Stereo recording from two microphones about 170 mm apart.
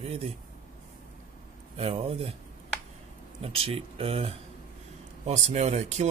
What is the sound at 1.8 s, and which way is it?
Speech, 35° right (ahead or behind).